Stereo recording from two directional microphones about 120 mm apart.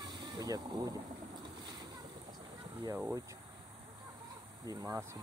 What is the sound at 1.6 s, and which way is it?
Boat, 35° right (ahead or behind).